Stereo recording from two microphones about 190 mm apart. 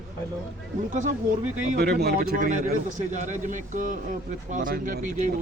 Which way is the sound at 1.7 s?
55° right (ahead or behind).